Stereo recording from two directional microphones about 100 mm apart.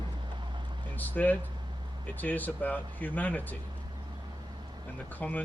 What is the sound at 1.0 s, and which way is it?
Speech, 15° left (ahead or behind).